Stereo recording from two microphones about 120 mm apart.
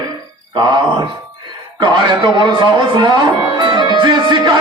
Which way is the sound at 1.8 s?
40° right (ahead or behind).